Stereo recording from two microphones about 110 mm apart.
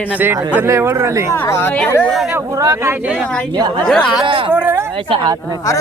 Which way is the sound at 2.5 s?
30° right (ahead or behind).